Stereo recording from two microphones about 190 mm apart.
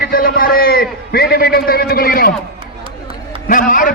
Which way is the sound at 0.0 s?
50° left (ahead or behind).